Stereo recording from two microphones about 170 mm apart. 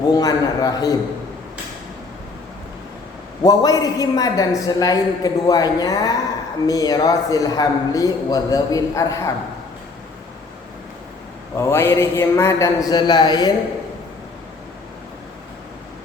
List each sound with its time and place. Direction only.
0.1 s a man's voice: 20° left (ahead or behind)
3.4 s a man's voice: 20° left (ahead or behind)
11.5 s a man's voice: 15° left (ahead or behind)